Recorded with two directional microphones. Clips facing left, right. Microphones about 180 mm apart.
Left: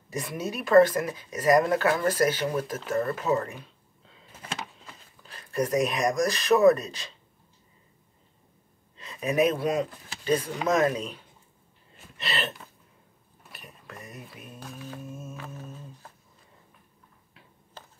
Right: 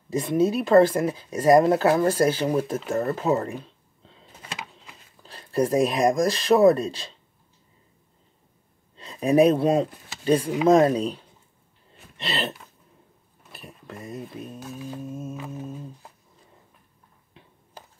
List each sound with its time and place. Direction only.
0.1 s speech: 30° right (ahead or behind)
3.1 s a sound: 25° right (ahead or behind)
5.2 s speech: 30° right (ahead or behind)
8.9 s speech: 35° right (ahead or behind)
12.3 s speech: 30° right (ahead or behind)
13.8 s speech: 30° right (ahead or behind)
15.3 s humming: 15° right (ahead or behind)
17.8 s a sound: 15° right (ahead or behind)